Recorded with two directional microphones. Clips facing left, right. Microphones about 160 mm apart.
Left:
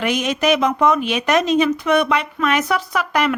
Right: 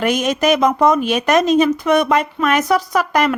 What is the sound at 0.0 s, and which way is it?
A woman's voice, 45° right (ahead or behind).